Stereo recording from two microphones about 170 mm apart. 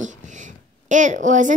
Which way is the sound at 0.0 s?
45° right (ahead or behind).